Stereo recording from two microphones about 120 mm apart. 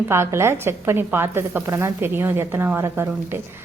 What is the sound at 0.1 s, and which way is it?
Speech, 20° right (ahead or behind).